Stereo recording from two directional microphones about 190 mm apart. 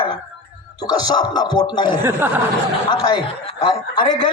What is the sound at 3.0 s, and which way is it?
Speech, 25° left (ahead or behind).